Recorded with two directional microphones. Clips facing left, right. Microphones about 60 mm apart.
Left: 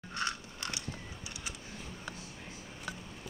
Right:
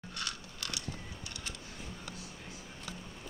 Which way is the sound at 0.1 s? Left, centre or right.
Left.